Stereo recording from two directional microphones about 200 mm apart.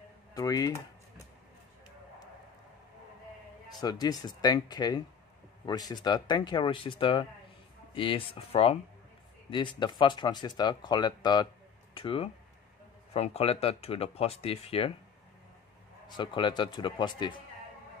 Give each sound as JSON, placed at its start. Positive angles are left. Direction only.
{"t": 0.3, "sound": "a sound", "side_deg": 20}
{"t": 3.8, "sound": "speech", "side_deg": 20}
{"t": 16.2, "sound": "speech", "side_deg": 25}